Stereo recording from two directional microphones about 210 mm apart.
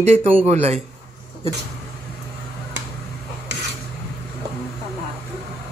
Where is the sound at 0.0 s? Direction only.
30° right (ahead or behind).